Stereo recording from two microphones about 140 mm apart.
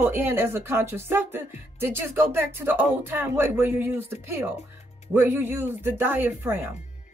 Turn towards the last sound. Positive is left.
turn(degrees=-15)  # may be behind; listen again after turning